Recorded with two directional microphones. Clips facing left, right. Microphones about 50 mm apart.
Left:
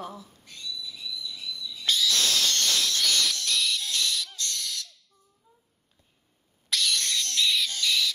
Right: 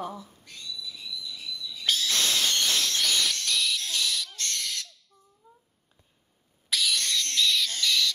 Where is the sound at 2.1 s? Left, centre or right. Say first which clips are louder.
Even; right.